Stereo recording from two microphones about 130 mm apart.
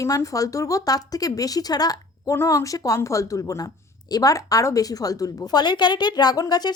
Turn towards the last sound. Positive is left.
turn(degrees=30)  # may be behind; listen again after turning